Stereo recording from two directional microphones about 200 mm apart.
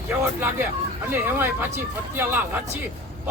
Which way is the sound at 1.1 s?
10° right (ahead or behind).